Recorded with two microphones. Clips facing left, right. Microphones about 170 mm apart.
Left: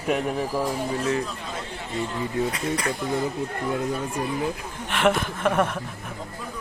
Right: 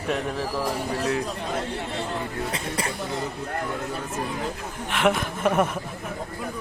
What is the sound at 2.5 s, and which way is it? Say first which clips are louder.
Speech: left 3 dB; 30° right (ahead or behind).